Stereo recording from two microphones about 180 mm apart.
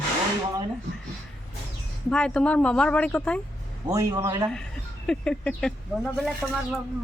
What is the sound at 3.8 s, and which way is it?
Speech, 20° right (ahead or behind).